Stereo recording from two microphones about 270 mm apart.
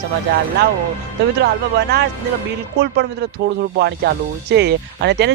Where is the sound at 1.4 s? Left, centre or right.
Right.